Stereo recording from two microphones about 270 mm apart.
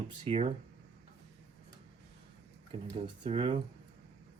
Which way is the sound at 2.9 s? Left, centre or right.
Centre.